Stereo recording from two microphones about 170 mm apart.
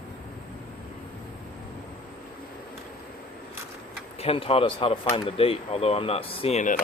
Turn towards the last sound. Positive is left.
turn(degrees=40)  # may be behind; listen again after turning